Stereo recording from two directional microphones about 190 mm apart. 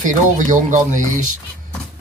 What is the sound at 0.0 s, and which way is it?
Speech, 45° right (ahead or behind).